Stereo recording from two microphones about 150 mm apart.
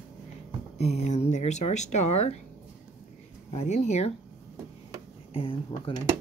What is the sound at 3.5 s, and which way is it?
Speech, 50° left (ahead or behind).